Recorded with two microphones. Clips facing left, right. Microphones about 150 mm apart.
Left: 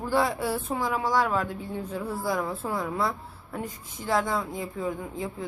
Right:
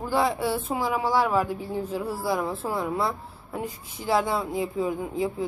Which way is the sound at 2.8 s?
20° right (ahead or behind).